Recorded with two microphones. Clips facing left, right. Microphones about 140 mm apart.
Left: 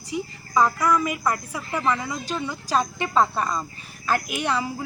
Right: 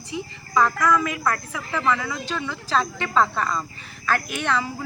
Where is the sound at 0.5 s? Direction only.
15° left (ahead or behind).